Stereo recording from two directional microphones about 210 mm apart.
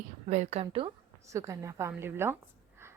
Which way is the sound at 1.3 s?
15° right (ahead or behind).